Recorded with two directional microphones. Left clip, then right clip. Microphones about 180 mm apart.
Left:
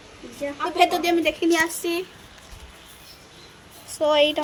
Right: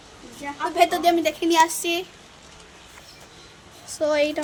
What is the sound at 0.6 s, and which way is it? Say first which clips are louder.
A woman's voice: right 1 dB; 15° right (ahead or behind).